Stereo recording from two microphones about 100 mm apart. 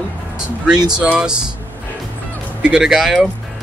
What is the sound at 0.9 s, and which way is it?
Speech, 10° right (ahead or behind).